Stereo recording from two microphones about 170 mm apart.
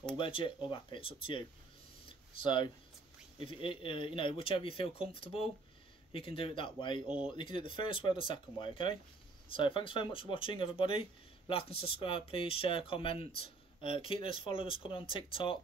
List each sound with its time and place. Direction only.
0.2 s speech: 30° left (ahead or behind)
2.0 s a sound: 30° left (ahead or behind)
3.4 s speech: 30° left (ahead or behind)